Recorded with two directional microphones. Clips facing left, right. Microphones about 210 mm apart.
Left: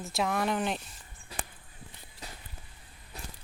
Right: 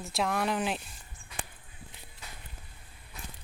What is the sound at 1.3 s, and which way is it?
Walk, 35° left (ahead or behind).